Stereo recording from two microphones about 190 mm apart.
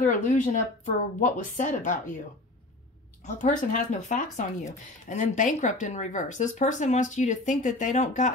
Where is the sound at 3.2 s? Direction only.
40° left (ahead or behind).